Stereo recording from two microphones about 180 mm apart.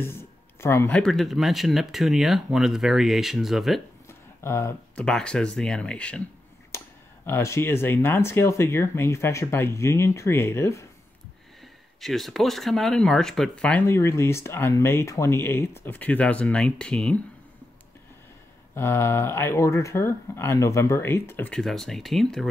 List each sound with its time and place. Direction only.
0.0 s speech: 15° left (ahead or behind)
4.1 s speech: 15° left (ahead or behind)
6.7 s a sound: 15° left (ahead or behind)
7.2 s speech: 15° left (ahead or behind)
12.0 s speech: centre (ahead or behind)
18.8 s speech: 15° left (ahead or behind)